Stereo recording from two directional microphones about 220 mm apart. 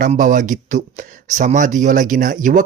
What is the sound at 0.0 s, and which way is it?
Speech, 35° right (ahead or behind).